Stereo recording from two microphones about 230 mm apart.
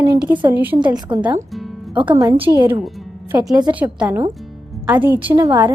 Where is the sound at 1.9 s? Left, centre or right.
Right.